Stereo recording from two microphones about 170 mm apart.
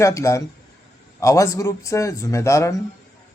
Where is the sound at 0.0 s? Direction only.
15° left (ahead or behind).